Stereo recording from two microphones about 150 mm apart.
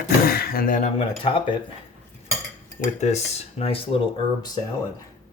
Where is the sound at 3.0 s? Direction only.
45° left (ahead or behind).